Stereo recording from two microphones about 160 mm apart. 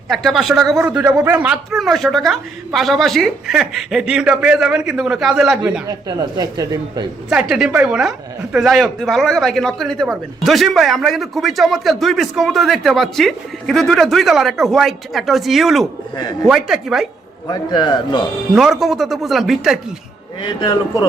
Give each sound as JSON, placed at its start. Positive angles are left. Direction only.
{"t": 0.1, "sound": "speech", "side_deg": 0}
{"t": 6.1, "sound": "speech", "side_deg": -25}
{"t": 7.3, "sound": "speech", "side_deg": -5}
{"t": 17.5, "sound": "speech", "side_deg": 30}
{"t": 18.5, "sound": "speech", "side_deg": -5}
{"t": 20.4, "sound": "speech", "side_deg": 30}